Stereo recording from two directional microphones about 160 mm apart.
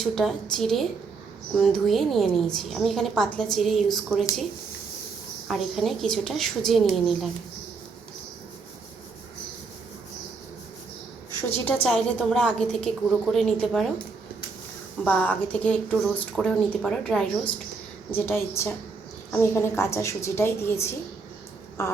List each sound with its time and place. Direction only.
0.0 s a woman's voice: centre (ahead or behind)
5.5 s a woman's voice: centre (ahead or behind)
11.4 s a woman's voice: 10° left (ahead or behind)
15.0 s a woman's voice: 10° left (ahead or behind)
18.1 s a woman's voice: 15° left (ahead or behind)